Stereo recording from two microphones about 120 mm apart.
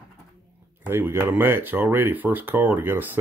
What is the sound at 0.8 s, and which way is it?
Speech, 20° right (ahead or behind).